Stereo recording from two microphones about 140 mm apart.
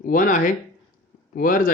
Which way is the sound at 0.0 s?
75° left (ahead or behind).